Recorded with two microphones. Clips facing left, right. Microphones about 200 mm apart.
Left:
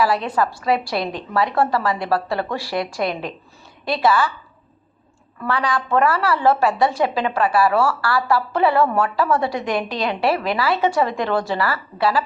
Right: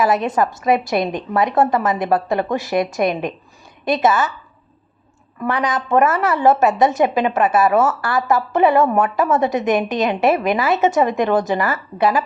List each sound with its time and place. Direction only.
0.0 s a woman's voice: 20° right (ahead or behind)
5.4 s a woman's voice: 20° right (ahead or behind)